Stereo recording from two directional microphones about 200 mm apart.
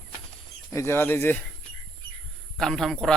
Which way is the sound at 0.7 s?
15° left (ahead or behind).